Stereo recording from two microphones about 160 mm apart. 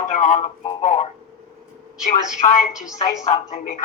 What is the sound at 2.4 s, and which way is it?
A woman's voice, 55° left (ahead or behind).